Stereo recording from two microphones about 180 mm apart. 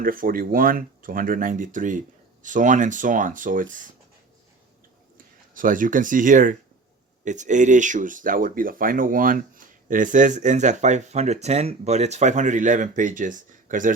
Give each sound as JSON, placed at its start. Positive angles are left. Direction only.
{"t": 0.0, "sound": "speech", "side_deg": -50}
{"t": 5.1, "sound": "speech", "side_deg": -50}